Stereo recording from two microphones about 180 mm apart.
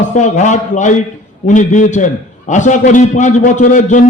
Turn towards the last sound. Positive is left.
turn(degrees=45)  # may be behind; listen again after turning